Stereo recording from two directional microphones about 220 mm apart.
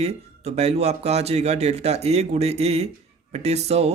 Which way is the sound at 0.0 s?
30° right (ahead or behind).